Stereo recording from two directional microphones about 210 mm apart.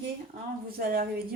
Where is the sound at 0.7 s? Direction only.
45° right (ahead or behind).